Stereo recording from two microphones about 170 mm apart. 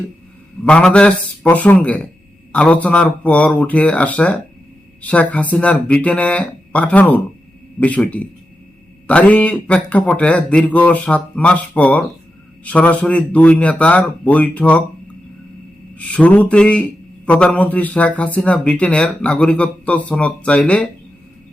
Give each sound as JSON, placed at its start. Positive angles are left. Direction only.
{"t": 0.6, "sound": "speech", "side_deg": 5}